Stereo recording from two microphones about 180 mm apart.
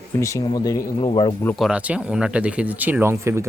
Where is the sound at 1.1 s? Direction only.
30° left (ahead or behind).